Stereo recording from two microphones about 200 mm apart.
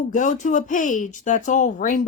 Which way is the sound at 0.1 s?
40° left (ahead or behind).